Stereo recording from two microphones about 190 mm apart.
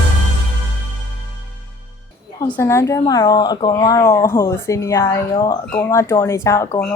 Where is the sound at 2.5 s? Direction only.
15° left (ahead or behind).